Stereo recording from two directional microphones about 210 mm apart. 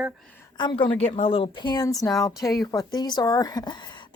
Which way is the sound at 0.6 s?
25° left (ahead or behind).